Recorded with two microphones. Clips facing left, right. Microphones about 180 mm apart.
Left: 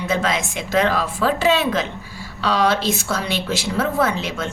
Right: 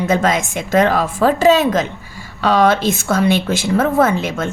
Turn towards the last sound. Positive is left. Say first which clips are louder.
# right 5 dB
turn(degrees=-50)  # may be behind; listen again after turning